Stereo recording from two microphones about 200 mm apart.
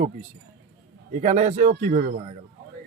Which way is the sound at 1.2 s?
35° right (ahead or behind).